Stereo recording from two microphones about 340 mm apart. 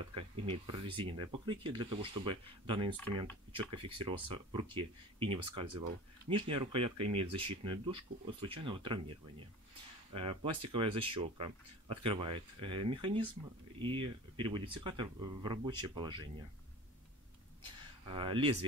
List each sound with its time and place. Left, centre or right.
0.1 s speech: centre
10.1 s speech: centre
18.0 s speech: centre